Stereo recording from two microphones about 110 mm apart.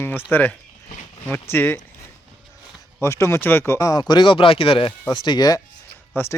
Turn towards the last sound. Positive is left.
turn(degrees=20)  # may be behind; listen again after turning